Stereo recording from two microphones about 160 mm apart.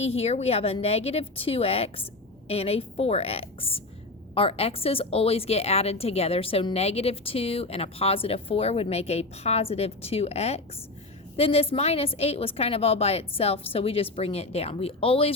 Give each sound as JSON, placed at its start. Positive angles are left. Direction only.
{"t": 0.0, "sound": "a woman's voice", "side_deg": 40}